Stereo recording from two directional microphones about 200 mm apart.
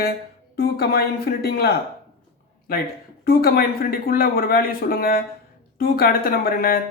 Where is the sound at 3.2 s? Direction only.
50° left (ahead or behind).